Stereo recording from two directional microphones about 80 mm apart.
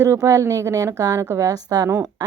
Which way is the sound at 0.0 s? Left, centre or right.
Right.